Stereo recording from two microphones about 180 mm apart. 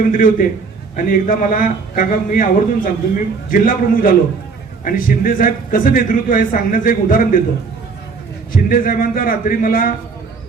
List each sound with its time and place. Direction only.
0.1 s a man's voice: 50° left (ahead or behind)
8.5 s a man's voice: 50° left (ahead or behind)